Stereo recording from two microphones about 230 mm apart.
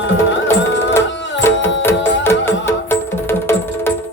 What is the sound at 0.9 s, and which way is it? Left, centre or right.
Music, centre.